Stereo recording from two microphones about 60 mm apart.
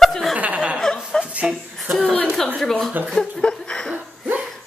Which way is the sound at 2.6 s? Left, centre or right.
Centre.